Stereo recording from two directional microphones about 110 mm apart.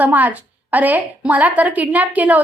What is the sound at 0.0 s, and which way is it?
A woman's voice, 15° right (ahead or behind).